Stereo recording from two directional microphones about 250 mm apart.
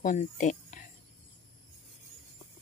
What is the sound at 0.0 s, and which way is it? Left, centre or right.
Speech, left.